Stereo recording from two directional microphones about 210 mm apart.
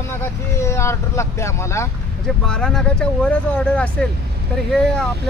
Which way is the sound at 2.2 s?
5° left (ahead or behind).